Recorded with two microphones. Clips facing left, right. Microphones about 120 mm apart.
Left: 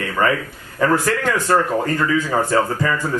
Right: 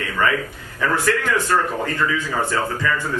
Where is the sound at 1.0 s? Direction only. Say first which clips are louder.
Left 1 dB; 35° left (ahead or behind).